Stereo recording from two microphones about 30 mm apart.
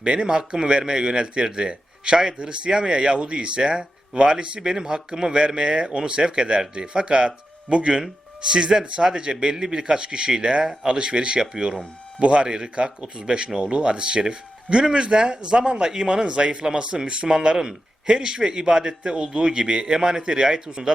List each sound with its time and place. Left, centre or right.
0.0 s speech: right
12.2 s speech: right